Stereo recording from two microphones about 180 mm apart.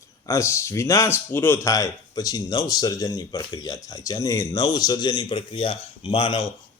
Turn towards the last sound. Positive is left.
turn(degrees=30)  # may be behind; listen again after turning